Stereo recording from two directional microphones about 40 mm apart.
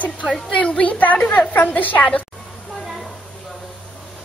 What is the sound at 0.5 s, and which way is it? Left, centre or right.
A woman's voice, left.